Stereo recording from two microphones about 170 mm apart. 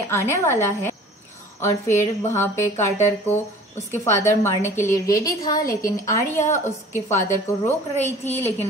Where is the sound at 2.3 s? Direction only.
15° left (ahead or behind).